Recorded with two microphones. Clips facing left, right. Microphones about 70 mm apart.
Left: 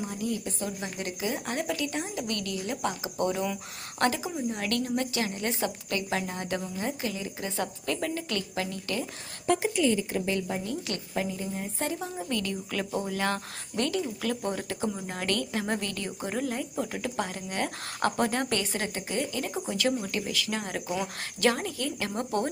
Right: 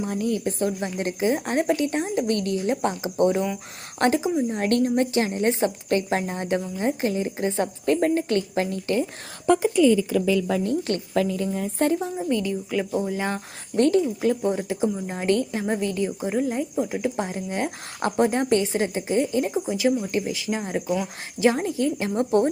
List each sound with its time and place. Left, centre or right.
0.0 s a woman's voice: right
0.8 s a woman's voice: right
4.5 s a woman's voice: right
10.6 s a woman's voice: right
11.1 s a woman's voice: right
11.9 s a woman's voice: right
12.8 s speech: centre
13.1 s speech: centre
13.7 s a woman's voice: right
14.2 s a woman's voice: right
20.1 s a woman's voice: right